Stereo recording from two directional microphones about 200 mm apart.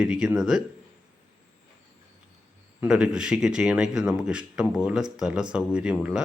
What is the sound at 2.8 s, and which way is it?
Speech, 5° right (ahead or behind).